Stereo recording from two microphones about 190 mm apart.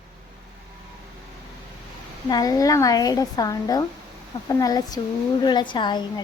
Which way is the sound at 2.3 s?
20° left (ahead or behind).